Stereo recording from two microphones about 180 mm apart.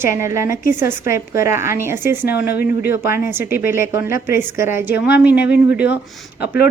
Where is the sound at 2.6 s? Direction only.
55° left (ahead or behind).